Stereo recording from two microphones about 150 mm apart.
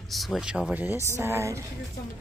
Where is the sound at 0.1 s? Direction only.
Centre (ahead or behind); by 1.6 s 20° right (ahead or behind).